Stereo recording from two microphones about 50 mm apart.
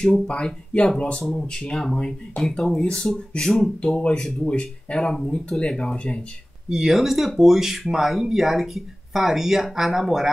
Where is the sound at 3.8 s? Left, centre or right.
Left.